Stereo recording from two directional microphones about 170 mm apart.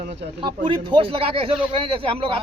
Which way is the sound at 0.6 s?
30° right (ahead or behind).